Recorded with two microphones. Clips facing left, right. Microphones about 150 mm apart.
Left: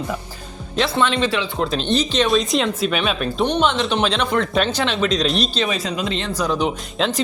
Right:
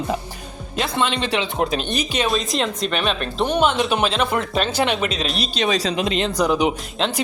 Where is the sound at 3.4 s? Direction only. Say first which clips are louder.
Right 1 dB; 10° right (ahead or behind).